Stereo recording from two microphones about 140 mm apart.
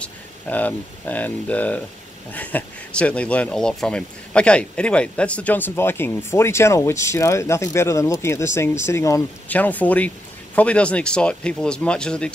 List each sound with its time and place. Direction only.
0.0 s speech: 10° left (ahead or behind)